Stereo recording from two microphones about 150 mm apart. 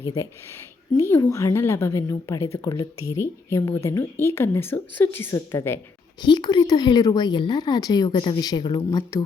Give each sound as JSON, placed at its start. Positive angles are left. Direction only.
{"t": 0.0, "sound": "a woman's voice", "side_deg": 20}
{"t": 6.2, "sound": "speech", "side_deg": 30}